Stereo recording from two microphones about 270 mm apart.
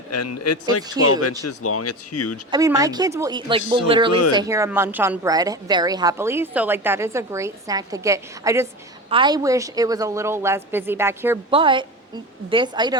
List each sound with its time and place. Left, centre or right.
0.1 s a man's voice: left
2.5 s a woman's voice: centre